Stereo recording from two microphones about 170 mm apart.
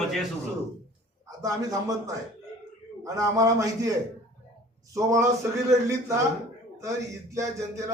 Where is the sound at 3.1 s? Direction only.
20° right (ahead or behind).